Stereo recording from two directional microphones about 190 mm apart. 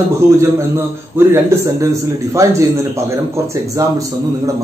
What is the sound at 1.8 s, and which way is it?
Speech, 15° right (ahead or behind).